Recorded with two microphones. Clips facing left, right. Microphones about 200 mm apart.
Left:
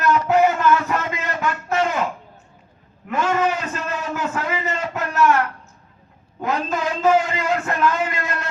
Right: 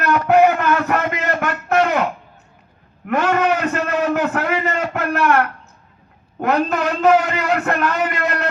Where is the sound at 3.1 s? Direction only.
65° right (ahead or behind).